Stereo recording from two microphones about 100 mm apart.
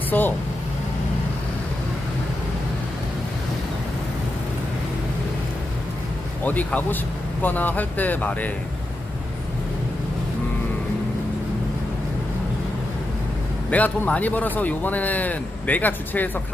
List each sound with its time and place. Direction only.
0.1 s speech: 20° left (ahead or behind)
6.4 s a man's voice: 15° left (ahead or behind)
13.7 s a man's voice: 15° left (ahead or behind)